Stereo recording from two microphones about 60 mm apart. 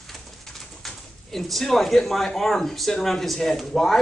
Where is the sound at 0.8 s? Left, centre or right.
Centre.